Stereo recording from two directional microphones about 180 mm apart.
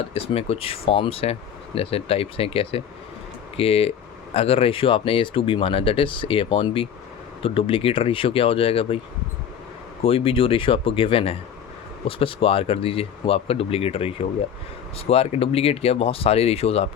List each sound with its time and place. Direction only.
0.0 s speech: 35° left (ahead or behind)
10.0 s speech: 30° left (ahead or behind)